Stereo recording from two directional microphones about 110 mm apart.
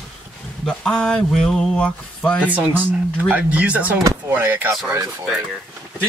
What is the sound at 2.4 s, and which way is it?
Speech, 15° right (ahead or behind).